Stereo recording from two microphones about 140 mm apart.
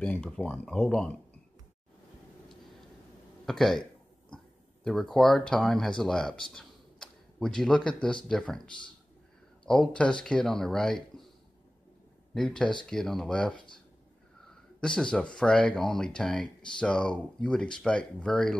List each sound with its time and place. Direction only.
0.0 s speech: 5° left (ahead or behind)
3.4 s speech: 5° left (ahead or behind)
4.8 s speech: centre (ahead or behind)
9.7 s speech: 5° left (ahead or behind)
12.4 s speech: 5° left (ahead or behind)